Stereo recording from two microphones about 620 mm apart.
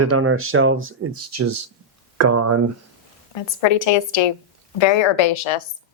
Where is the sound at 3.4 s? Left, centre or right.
Left.